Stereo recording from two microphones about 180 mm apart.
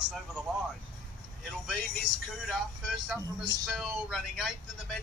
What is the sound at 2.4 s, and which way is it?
Speech, centre (ahead or behind).